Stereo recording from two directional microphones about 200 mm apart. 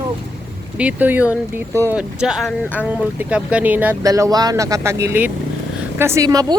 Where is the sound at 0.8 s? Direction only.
5° right (ahead or behind).